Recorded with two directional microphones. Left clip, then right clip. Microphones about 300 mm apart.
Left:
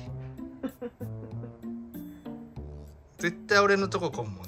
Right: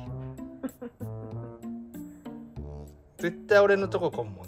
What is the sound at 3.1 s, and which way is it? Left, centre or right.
A man's voice, centre.